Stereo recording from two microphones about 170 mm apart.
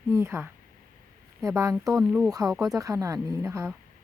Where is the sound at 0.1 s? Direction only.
15° right (ahead or behind).